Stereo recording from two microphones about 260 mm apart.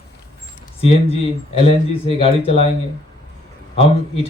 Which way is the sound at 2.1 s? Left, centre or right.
Left.